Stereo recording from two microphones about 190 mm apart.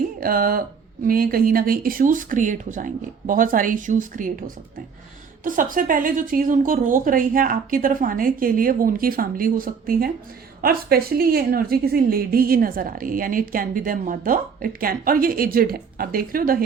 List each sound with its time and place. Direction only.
0.2 s a woman's voice: 50° right (ahead or behind)